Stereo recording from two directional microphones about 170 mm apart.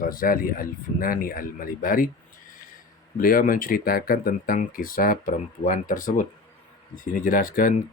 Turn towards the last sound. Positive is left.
turn(degrees=55)  # may be behind; listen again after turning